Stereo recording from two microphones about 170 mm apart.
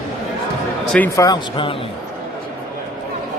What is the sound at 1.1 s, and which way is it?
Speech, 20° left (ahead or behind).